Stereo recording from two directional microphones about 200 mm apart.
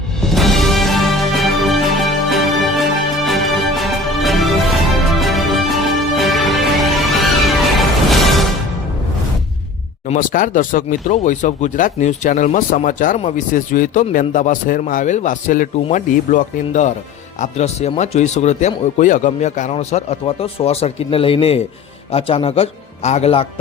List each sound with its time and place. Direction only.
0.2 s music: centre (ahead or behind)
10.1 s speech: 40° left (ahead or behind)